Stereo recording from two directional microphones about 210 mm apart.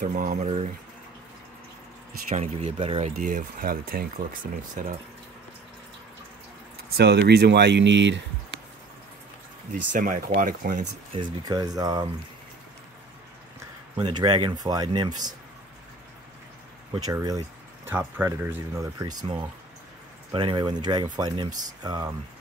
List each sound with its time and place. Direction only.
0.0 s speech: 40° right (ahead or behind)
2.2 s speech: 30° right (ahead or behind)
3.2 s speech: 40° right (ahead or behind)
7.0 s speech: 50° right (ahead or behind)
9.9 s speech: 40° right (ahead or behind)
11.4 s speech: 15° right (ahead or behind)
13.9 s speech: 20° right (ahead or behind)
16.9 s speech: 20° right (ahead or behind)